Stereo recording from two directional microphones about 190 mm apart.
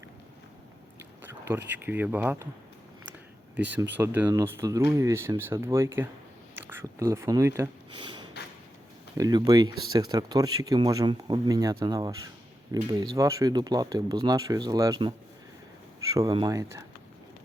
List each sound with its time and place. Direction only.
0.9 s a sound: 10° right (ahead or behind)
1.8 s speech: 10° right (ahead or behind)
3.9 s speech: 10° right (ahead or behind)
9.1 s speech: 20° right (ahead or behind)
16.1 s speech: 20° right (ahead or behind)